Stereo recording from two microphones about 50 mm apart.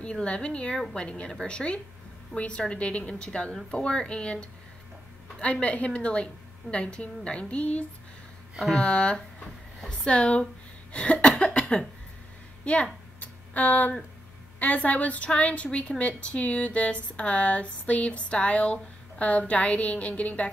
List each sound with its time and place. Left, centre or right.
0.0 s a woman's voice: left
10.9 s cough: left
12.7 s a woman's voice: left
13.2 s a sound: left
14.6 s a woman's voice: left